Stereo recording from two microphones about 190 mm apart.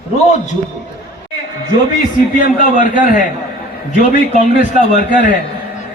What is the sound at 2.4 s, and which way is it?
Speech, 45° left (ahead or behind).